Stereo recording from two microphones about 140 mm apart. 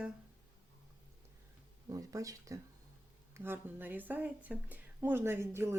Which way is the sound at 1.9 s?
25° right (ahead or behind).